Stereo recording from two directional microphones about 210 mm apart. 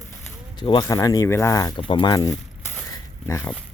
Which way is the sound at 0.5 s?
20° left (ahead or behind).